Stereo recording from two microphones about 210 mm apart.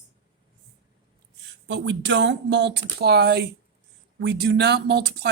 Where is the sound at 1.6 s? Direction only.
55° right (ahead or behind).